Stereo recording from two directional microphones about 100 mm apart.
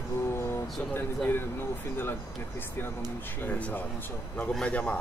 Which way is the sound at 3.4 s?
15° left (ahead or behind).